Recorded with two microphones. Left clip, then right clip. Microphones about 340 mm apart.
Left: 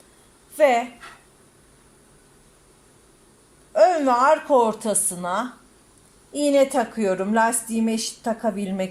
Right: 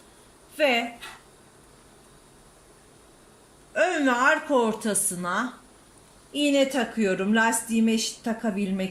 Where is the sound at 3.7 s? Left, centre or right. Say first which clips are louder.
Left 6 dB; centre.